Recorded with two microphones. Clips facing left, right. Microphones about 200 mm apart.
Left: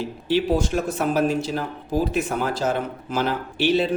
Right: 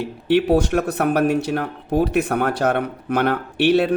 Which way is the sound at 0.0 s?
65° right (ahead or behind).